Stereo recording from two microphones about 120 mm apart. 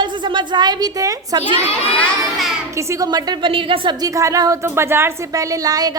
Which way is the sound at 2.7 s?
25° right (ahead or behind).